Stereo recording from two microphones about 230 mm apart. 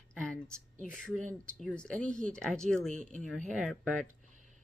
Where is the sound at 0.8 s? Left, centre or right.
Centre.